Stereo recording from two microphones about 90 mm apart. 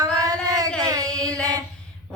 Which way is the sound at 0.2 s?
40° right (ahead or behind).